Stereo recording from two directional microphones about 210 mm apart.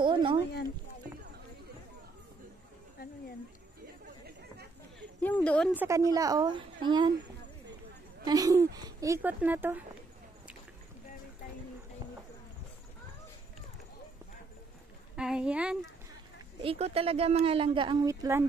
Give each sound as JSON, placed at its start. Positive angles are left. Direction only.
{"t": 0.0, "sound": "speech", "side_deg": -25}
{"t": 3.0, "sound": "a sound", "side_deg": 45}
{"t": 5.2, "sound": "speech", "side_deg": 5}
{"t": 5.7, "sound": "speech", "side_deg": -10}
{"t": 8.3, "sound": "speech", "side_deg": -15}
{"t": 15.1, "sound": "speech", "side_deg": -5}
{"t": 16.5, "sound": "a woman's voice", "side_deg": -30}